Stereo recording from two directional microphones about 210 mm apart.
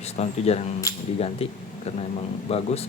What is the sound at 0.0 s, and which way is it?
Speech, 30° left (ahead or behind).